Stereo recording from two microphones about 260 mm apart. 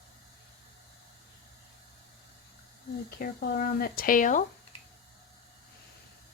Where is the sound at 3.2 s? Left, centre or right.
Left.